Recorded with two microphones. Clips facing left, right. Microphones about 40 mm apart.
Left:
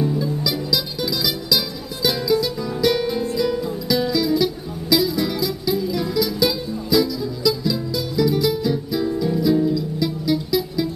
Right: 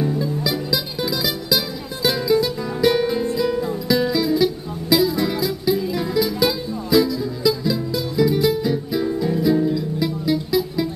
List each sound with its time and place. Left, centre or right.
0.4 s music: right
10.0 s music: centre